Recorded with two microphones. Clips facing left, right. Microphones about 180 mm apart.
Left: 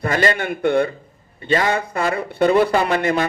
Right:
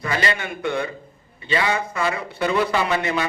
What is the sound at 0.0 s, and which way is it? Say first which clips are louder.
Speech: left 5 dB; 45° left (ahead or behind).